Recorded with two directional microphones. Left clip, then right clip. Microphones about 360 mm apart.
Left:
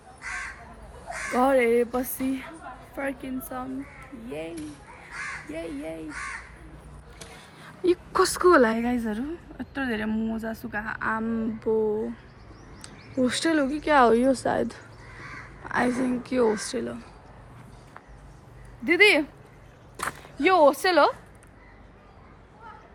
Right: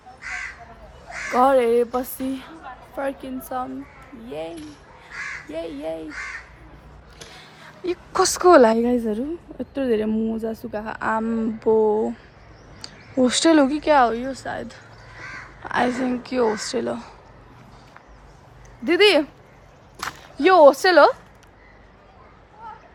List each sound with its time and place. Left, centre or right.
0.2 s crow: centre
1.3 s a woman's voice: centre
7.6 s a woman's voice: centre
13.2 s a woman's voice: centre
18.9 s a woman's voice: centre
20.4 s a woman's voice: centre